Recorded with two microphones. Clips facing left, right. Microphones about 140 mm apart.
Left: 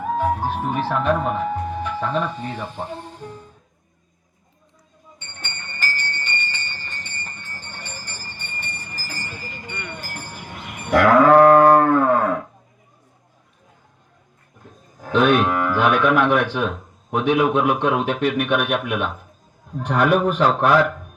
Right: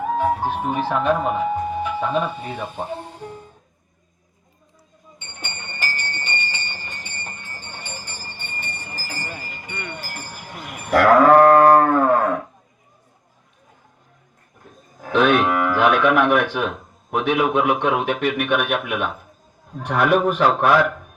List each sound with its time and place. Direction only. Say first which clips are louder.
0.0 s speech: right 1 dB; centre (ahead or behind)
2.7 s speech: right 2 dB; 20° right (ahead or behind)
5.2 s music: right 2 dB; 15° right (ahead or behind)
9.9 s chink: even; 10° right (ahead or behind)
10.6 s a sound: even; 20° left (ahead or behind)
11.1 s a sound: even; centre (ahead or behind)
15.2 s a man's voice: even; 5° right (ahead or behind)